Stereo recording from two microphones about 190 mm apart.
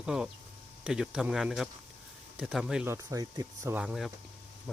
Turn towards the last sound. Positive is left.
turn(degrees=-5)  # may be behind; listen again after turning